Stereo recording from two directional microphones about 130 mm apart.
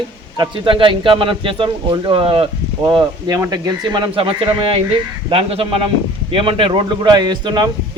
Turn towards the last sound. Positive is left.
turn(degrees=-35)  # may be behind; listen again after turning